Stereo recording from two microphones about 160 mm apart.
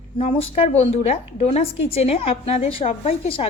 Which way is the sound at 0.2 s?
40° left (ahead or behind).